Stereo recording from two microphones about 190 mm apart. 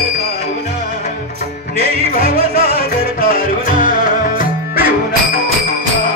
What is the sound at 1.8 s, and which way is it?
Music, 30° right (ahead or behind).